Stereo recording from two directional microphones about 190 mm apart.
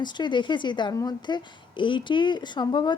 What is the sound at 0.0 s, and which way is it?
A woman's voice, 25° left (ahead or behind).